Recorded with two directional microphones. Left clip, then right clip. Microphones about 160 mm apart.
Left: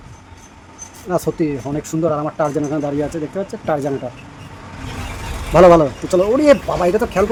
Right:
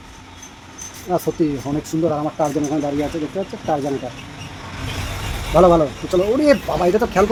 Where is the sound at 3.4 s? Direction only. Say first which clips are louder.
Left 2 dB; 35° left (ahead or behind).